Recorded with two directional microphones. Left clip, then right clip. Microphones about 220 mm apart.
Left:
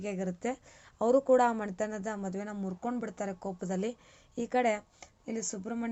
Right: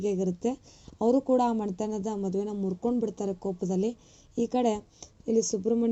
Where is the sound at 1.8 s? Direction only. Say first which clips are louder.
Right 3 dB; 10° left (ahead or behind).